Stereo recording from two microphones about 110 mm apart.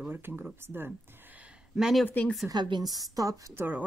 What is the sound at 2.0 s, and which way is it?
Speech, 15° left (ahead or behind).